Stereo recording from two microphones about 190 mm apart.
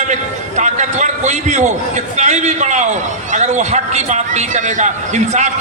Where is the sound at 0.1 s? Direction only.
40° right (ahead or behind).